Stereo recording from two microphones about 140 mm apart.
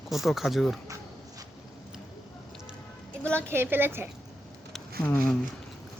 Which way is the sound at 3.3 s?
15° right (ahead or behind).